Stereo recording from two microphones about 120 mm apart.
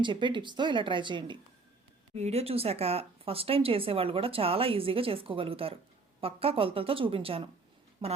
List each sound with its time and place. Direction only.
0.0 s speech: 40° right (ahead or behind)
2.1 s speech: 60° right (ahead or behind); by 8.2 s 45° right (ahead or behind)